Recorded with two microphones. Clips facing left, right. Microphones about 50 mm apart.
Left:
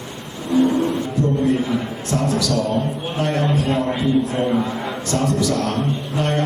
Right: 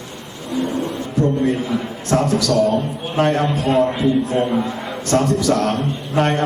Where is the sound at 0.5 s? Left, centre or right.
Left.